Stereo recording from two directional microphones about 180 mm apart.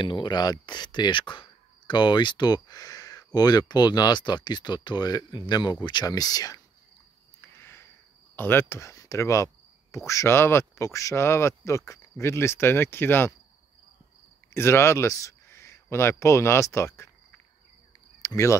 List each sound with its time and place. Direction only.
0.0 s speech: 25° left (ahead or behind)
7.5 s a sound: 15° left (ahead or behind)
8.4 s speech: 10° left (ahead or behind)
14.5 s speech: 15° left (ahead or behind)
18.2 s speech: 15° left (ahead or behind)